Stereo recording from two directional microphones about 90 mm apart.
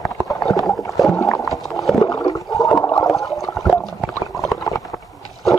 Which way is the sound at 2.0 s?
45° left (ahead or behind).